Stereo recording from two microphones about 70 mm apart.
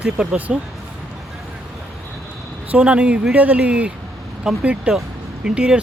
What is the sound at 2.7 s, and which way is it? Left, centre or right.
Speech, centre.